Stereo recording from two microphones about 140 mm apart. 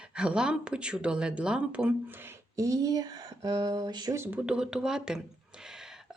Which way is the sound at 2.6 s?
25° right (ahead or behind).